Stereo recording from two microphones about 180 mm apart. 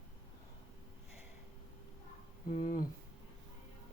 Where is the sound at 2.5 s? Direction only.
50° left (ahead or behind).